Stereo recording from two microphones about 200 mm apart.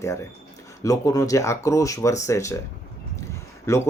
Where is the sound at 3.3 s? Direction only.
15° left (ahead or behind).